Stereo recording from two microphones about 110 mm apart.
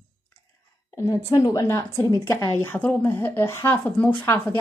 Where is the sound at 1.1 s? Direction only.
35° left (ahead or behind); by 4.6 s 20° left (ahead or behind).